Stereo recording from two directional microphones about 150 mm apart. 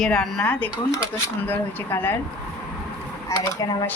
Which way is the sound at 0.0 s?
5° left (ahead or behind).